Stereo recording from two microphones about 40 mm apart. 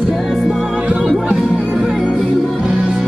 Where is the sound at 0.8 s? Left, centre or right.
Right.